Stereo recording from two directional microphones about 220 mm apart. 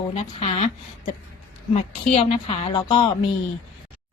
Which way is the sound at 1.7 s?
25° left (ahead or behind).